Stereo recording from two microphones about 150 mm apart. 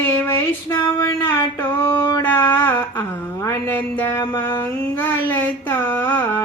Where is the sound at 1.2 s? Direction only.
15° left (ahead or behind).